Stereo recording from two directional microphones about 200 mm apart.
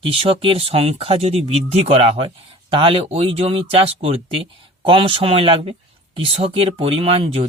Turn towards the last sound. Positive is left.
turn(degrees=-30)  # may be behind; listen again after turning